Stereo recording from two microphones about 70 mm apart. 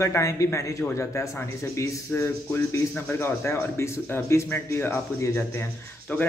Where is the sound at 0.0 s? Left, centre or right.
Left.